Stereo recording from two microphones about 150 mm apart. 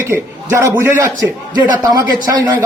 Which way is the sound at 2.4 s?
20° right (ahead or behind).